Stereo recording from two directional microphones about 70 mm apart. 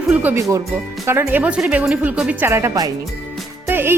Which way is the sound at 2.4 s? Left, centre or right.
Right.